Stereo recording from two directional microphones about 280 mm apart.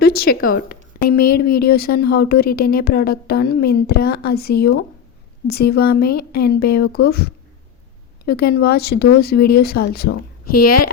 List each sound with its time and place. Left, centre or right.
0.0 s a woman's voice: left
10.5 s speech: left